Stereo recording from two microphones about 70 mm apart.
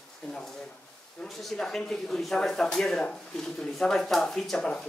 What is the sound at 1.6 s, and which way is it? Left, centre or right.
Speech, centre.